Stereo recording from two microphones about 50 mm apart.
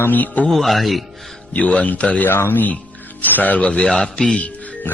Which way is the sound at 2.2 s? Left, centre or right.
Left.